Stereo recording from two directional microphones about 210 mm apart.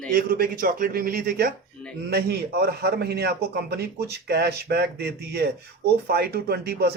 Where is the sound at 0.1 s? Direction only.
45° right (ahead or behind).